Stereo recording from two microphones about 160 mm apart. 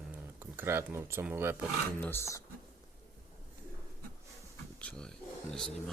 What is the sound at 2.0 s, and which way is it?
Speech, 15° left (ahead or behind).